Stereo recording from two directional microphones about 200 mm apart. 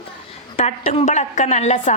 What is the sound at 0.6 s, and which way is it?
A woman's voice, 30° left (ahead or behind).